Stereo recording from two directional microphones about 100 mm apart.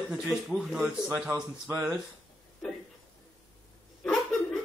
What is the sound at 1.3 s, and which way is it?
Speech, 30° right (ahead or behind).